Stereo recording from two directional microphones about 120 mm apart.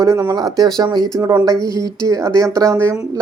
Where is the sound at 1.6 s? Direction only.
30° right (ahead or behind).